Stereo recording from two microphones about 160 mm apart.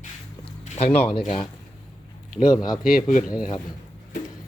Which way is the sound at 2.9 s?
55° left (ahead or behind).